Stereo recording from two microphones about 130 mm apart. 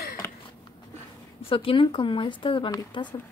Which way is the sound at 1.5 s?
45° left (ahead or behind).